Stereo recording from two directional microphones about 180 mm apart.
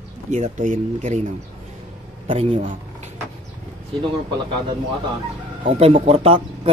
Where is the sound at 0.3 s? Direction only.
45° right (ahead or behind).